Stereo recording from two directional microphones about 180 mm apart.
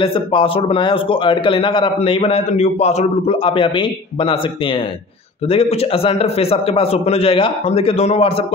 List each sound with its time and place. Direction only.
0.0 s a man's voice: 30° left (ahead or behind)
5.5 s a man's voice: 35° left (ahead or behind)